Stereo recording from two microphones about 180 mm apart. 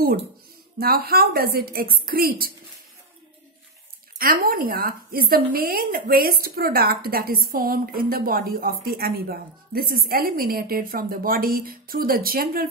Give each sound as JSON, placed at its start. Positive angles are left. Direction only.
{"t": 0.7, "sound": "a woman's voice", "side_deg": -55}
{"t": 4.2, "sound": "a woman's voice", "side_deg": -50}